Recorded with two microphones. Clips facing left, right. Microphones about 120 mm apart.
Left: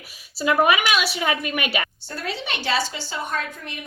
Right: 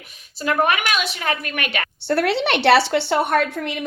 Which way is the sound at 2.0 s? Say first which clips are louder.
Right 12 dB; 70° right (ahead or behind).